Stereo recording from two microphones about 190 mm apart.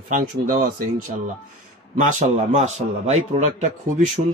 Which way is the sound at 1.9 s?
40° right (ahead or behind).